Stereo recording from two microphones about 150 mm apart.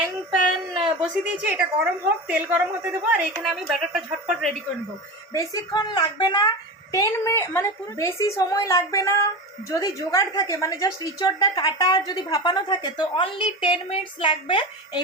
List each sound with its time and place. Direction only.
0.3 s a woman's voice: 5° right (ahead or behind)
5.3 s a woman's voice: 25° left (ahead or behind)
6.9 s a woman's voice: 20° left (ahead or behind)